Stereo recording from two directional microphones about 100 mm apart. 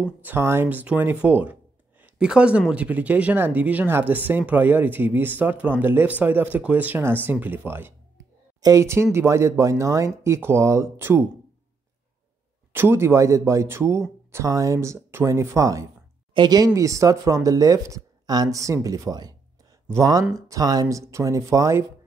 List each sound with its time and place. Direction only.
0.0 s speech: 20° right (ahead or behind)
8.5 s speech: 35° right (ahead or behind)
12.7 s speech: 25° right (ahead or behind)